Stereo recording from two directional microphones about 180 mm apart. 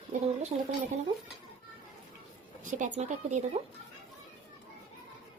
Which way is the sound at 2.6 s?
45° right (ahead or behind).